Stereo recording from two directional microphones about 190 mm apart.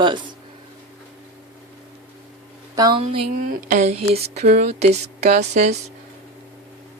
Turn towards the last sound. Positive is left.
turn(degrees=-35)  # may be behind; listen again after turning